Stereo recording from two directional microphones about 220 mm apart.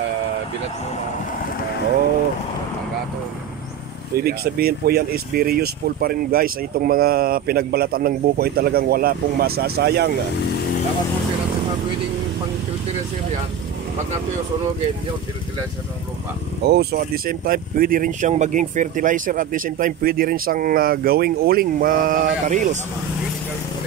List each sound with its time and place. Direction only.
4.2 s speech: 45° right (ahead or behind)
16.6 s speech: 45° right (ahead or behind)